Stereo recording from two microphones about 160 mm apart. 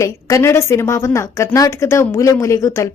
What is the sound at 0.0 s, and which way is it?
A woman's voice, 20° left (ahead or behind).